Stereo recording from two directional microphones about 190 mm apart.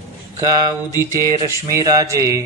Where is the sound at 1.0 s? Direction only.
15° right (ahead or behind).